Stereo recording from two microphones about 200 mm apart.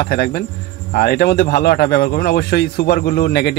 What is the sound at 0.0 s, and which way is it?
A man's voice, 50° left (ahead or behind).